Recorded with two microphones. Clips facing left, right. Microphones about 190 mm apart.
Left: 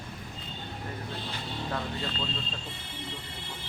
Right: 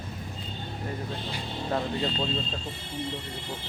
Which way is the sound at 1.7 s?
30° right (ahead or behind).